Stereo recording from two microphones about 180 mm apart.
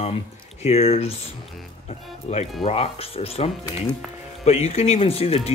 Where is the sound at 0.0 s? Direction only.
35° left (ahead or behind).